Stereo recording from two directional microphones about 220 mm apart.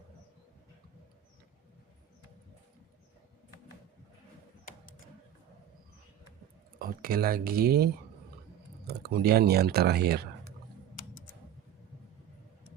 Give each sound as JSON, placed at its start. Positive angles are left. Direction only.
{"t": 6.7, "sound": "speech", "side_deg": -40}
{"t": 8.9, "sound": "speech", "side_deg": -45}